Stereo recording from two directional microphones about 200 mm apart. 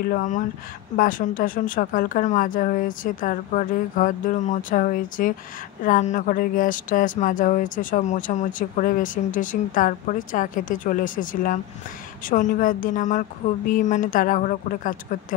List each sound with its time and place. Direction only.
0.0 s speech: 40° left (ahead or behind)